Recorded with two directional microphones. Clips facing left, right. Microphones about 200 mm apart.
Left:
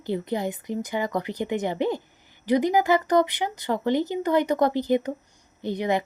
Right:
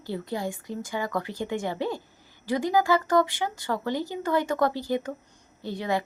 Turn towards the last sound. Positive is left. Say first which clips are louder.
# left 4 dB
turn(degrees=20)  # may be behind; listen again after turning